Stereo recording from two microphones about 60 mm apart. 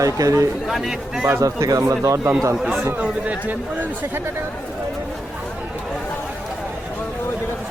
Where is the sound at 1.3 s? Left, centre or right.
Right.